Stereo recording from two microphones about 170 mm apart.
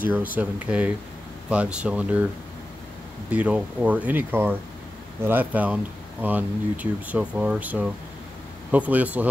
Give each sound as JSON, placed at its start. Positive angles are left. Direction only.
{"t": 0.4, "sound": "speech", "side_deg": -10}
{"t": 3.3, "sound": "speech", "side_deg": -5}